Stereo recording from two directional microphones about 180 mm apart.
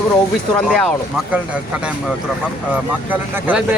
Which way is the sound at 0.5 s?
5° left (ahead or behind).